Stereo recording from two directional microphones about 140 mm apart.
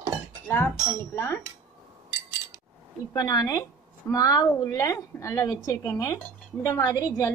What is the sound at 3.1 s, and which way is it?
A woman's voice, 25° left (ahead or behind).